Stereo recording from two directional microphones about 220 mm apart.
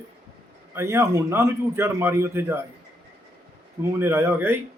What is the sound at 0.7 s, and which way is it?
A man's voice, 10° right (ahead or behind).